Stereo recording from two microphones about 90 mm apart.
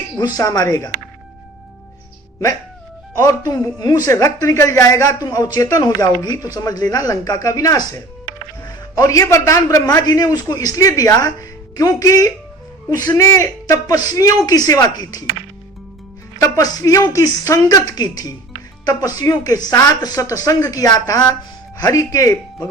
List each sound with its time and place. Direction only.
0.3 s a man's voice: 45° left (ahead or behind)
3.2 s a man's voice: 45° left (ahead or behind)
16.4 s a man's voice: 40° left (ahead or behind)